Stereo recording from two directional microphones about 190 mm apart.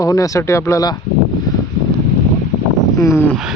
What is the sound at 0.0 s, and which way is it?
Speech, 15° left (ahead or behind).